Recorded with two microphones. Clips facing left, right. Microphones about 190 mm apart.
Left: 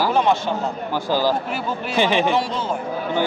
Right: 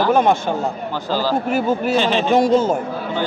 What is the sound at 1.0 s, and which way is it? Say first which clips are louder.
Speech: left 1 dB; 15° left (ahead or behind).